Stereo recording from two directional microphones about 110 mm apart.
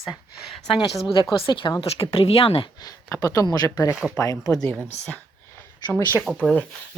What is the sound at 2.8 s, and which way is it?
Speech, 30° left (ahead or behind).